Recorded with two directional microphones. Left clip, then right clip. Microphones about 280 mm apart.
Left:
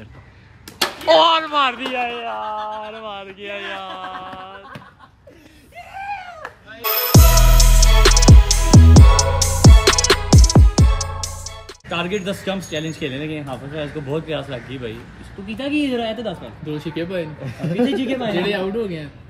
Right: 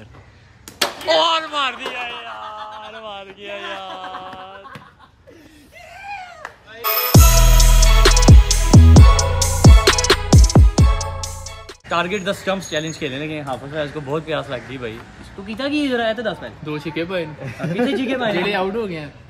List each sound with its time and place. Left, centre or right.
0.7 s slap: centre
6.0 s a sound: centre
6.8 s music: centre
12.3 s speech: centre
13.0 s speech: right
13.5 s speech: centre
15.4 s speech: centre
16.6 s speech: right
17.0 s speech: centre
17.5 s speech: centre